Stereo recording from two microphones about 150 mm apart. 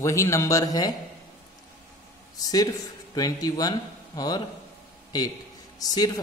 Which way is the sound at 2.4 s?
25° left (ahead or behind).